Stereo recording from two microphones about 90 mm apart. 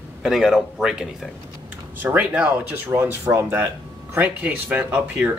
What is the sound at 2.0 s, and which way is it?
Speech, 20° right (ahead or behind).